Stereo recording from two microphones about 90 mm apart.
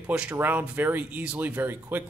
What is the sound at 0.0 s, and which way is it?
Speech, 15° right (ahead or behind).